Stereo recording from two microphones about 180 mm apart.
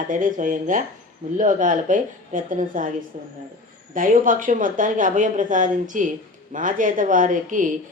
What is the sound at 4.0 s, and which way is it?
Speech, 50° right (ahead or behind).